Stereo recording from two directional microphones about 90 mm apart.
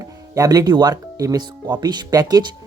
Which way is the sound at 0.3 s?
40° right (ahead or behind).